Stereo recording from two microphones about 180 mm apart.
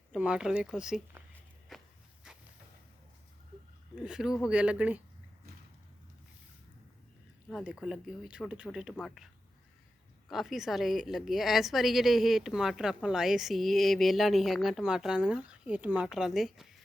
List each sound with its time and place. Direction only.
0.1 s a woman's voice: 5° right (ahead or behind)
1.7 s walk: centre (ahead or behind)
3.9 s a woman's voice: 5° right (ahead or behind)
7.5 s a woman's voice: 5° right (ahead or behind)